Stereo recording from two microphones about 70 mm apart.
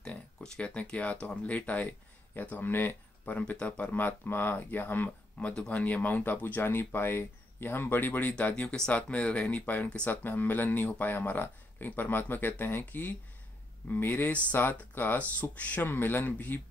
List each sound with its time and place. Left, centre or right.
0.0 s speech: centre; by 5.5 s left
5.5 s speech: centre
10.2 s speech: left
14.3 s speech: centre
14.6 s speech: left